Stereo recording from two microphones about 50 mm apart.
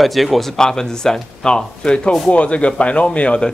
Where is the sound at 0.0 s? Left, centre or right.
Centre.